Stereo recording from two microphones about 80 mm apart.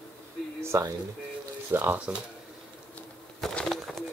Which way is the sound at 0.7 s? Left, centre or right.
Right.